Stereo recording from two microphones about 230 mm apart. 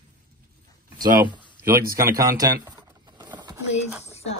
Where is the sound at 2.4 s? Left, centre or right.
Centre.